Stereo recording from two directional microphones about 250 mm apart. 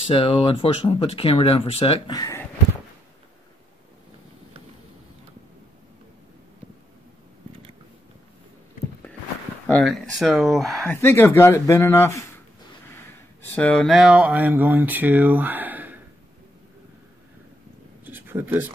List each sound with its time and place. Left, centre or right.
0.0 s speech: left
9.7 s speech: centre
18.0 s a sound: centre